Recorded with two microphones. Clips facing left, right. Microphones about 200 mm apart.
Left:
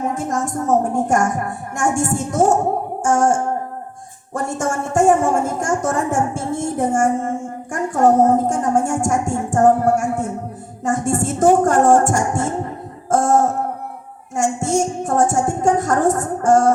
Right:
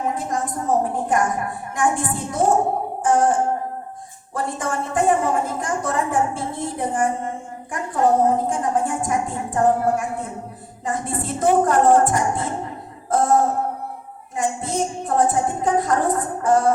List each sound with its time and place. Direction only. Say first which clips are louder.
0.1 s a woman's voice: left 3 dB; 45° left (ahead or behind)
13.1 s a sound: left 2 dB; 45° left (ahead or behind)
14.3 s a woman's voice: left 5 dB; 45° left (ahead or behind)